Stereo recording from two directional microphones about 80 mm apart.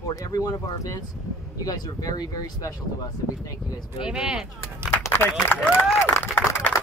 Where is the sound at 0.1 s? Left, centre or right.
Left.